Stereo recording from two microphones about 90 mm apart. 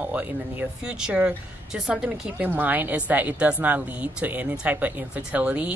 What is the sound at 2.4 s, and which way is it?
A woman's voice, 20° right (ahead or behind).